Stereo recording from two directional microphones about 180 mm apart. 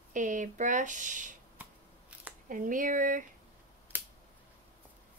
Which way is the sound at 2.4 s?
50° right (ahead or behind).